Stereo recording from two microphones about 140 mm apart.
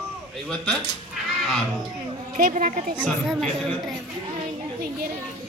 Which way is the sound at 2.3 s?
65° right (ahead or behind).